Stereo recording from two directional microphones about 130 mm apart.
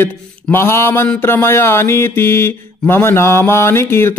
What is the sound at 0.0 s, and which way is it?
Mantra, 15° left (ahead or behind).